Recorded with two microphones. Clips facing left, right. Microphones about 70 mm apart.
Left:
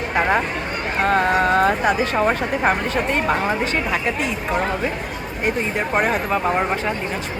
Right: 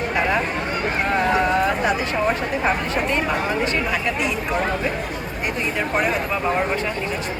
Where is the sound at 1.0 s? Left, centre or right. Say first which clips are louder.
Left 3 dB; left.